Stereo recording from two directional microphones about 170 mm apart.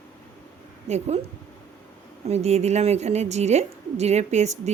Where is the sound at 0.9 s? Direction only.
40° right (ahead or behind).